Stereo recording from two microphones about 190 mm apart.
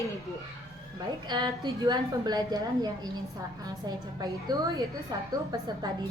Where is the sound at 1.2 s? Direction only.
25° right (ahead or behind).